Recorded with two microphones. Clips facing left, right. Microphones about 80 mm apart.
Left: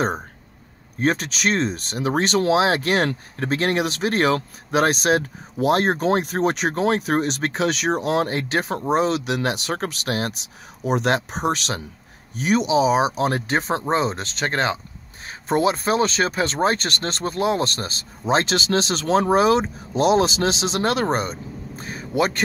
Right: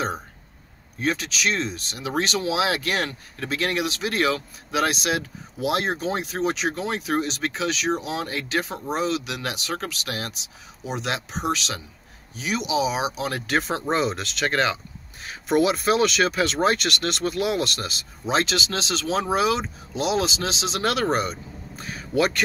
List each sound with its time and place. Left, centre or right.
0.9 s speech: left
20.8 s speech: left